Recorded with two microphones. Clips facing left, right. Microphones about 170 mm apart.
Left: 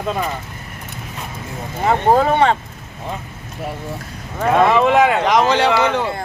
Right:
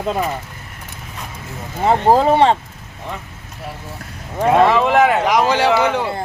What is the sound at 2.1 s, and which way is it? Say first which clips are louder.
Speech: right 2 dB; 30° right (ahead or behind).